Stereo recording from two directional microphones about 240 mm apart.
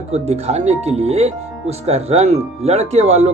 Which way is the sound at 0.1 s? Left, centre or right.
Right.